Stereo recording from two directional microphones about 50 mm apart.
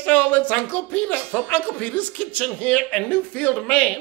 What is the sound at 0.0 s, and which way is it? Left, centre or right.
A man's voice, left.